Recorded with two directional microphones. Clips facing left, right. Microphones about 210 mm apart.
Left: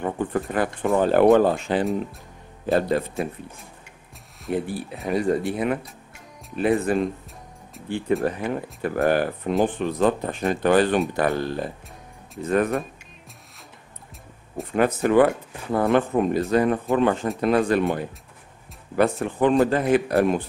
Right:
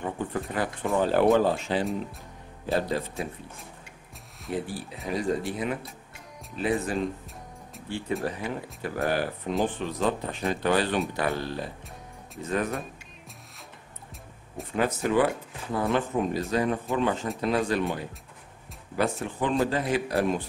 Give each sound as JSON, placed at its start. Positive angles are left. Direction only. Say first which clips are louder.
{"t": 0.0, "sound": "speech", "louder": "left 6 dB", "side_deg": 55}
{"t": 4.5, "sound": "speech", "louder": "left 5 dB", "side_deg": 55}
{"t": 8.2, "sound": "speech", "louder": "left 6 dB", "side_deg": 55}
{"t": 14.6, "sound": "speech", "louder": "left 6 dB", "side_deg": 55}